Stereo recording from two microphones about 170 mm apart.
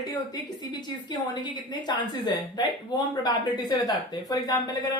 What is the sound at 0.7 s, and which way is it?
A woman's voice, 25° left (ahead or behind).